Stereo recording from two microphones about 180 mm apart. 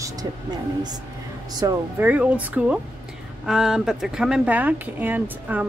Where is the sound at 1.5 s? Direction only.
20° right (ahead or behind).